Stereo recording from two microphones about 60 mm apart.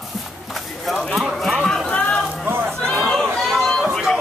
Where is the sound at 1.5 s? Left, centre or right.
Centre.